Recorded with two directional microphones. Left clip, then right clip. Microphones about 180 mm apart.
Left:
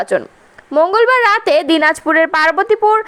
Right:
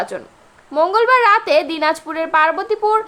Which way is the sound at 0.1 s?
40° left (ahead or behind).